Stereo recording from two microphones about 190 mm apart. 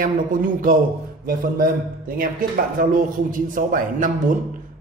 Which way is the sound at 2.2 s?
45° right (ahead or behind).